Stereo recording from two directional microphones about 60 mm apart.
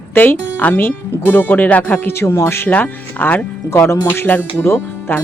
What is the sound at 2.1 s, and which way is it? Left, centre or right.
Speech, left.